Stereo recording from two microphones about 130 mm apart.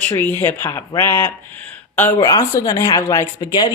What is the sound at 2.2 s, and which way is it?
A woman's voice, 30° left (ahead or behind).